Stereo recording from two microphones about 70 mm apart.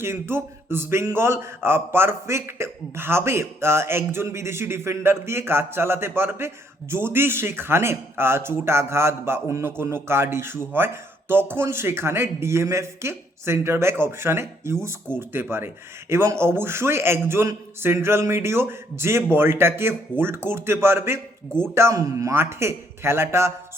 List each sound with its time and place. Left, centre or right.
0.0 s a man's voice: right